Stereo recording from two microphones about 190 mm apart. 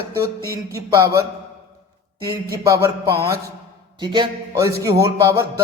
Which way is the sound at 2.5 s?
20° right (ahead or behind).